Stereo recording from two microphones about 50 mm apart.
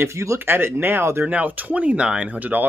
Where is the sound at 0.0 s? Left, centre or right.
Right.